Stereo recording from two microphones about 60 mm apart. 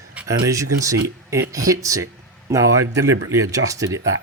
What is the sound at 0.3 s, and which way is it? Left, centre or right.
Speech, right.